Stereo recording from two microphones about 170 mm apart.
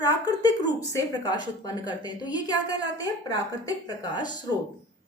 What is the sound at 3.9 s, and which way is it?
Speech, 25° left (ahead or behind).